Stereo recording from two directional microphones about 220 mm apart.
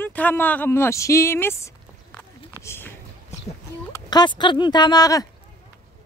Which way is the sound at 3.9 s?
20° left (ahead or behind).